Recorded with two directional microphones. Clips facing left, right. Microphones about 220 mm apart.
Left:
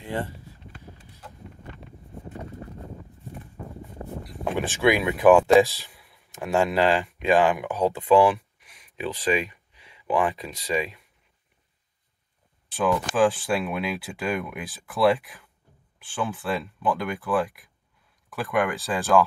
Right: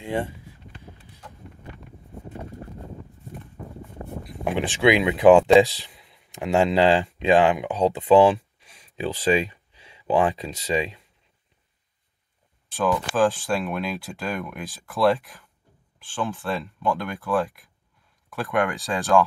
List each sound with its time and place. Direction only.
0.0 s speech: 15° right (ahead or behind)
4.5 s speech: 20° right (ahead or behind)
12.7 s speech: centre (ahead or behind)